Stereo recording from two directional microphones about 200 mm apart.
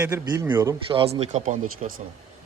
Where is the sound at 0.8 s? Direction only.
30° right (ahead or behind).